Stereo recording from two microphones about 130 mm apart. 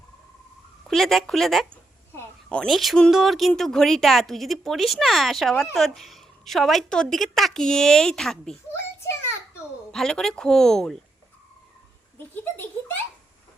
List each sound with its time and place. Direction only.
0.9 s speech: centre (ahead or behind)
9.9 s speech: 5° left (ahead or behind)
12.3 s a sound: 15° left (ahead or behind)